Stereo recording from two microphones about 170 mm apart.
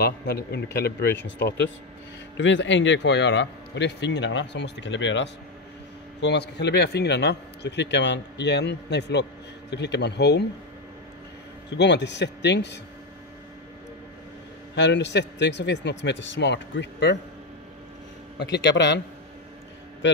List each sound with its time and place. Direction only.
0.0 s a man's voice: 70° left (ahead or behind)
1.2 s a man's voice: 90° left
11.7 s a man's voice: 90° left
14.8 s a man's voice: 90° left
18.4 s a man's voice: 90° left